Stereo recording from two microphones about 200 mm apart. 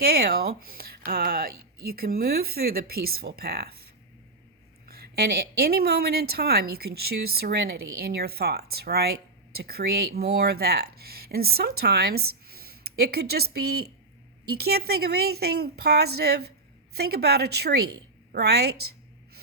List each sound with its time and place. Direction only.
0.0 s speech: 50° right (ahead or behind)
4.9 s speech: 50° right (ahead or behind)